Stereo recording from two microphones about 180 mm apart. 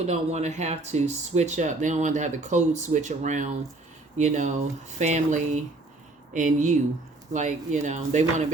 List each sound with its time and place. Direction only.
0.0 s speech: 40° right (ahead or behind)